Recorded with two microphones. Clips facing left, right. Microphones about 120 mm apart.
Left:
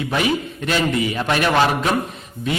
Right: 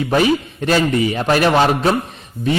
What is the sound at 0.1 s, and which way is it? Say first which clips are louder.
A man's voice: right 6 dB; 40° right (ahead or behind).